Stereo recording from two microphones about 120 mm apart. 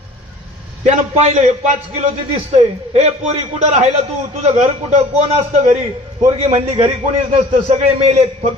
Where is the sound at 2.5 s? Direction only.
65° right (ahead or behind).